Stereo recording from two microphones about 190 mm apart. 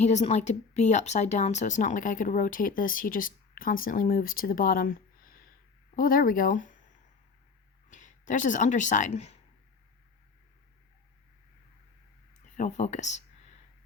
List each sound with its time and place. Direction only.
0.0 s speech: 35° left (ahead or behind)
7.9 s speech: 40° left (ahead or behind)
12.5 s speech: 40° left (ahead or behind)